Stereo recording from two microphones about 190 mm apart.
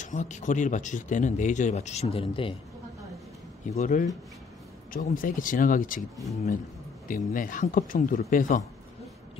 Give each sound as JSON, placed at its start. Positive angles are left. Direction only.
{"t": 0.0, "sound": "speech", "side_deg": 40}
{"t": 3.7, "sound": "speech", "side_deg": 40}
{"t": 7.1, "sound": "speech", "side_deg": 45}